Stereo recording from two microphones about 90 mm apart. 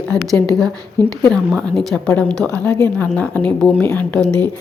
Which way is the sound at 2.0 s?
10° left (ahead or behind).